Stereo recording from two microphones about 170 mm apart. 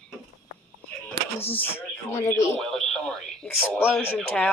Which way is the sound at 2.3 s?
15° left (ahead or behind).